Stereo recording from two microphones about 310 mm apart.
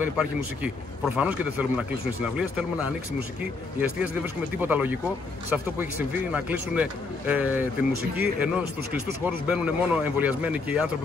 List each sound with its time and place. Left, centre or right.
0.0 s speech: centre
4.6 s speech: centre